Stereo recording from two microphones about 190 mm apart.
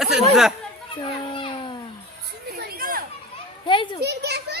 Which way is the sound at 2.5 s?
55° right (ahead or behind).